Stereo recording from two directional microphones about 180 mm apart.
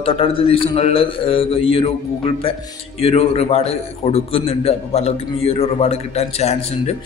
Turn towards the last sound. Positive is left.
turn(degrees=35)  # may be behind; listen again after turning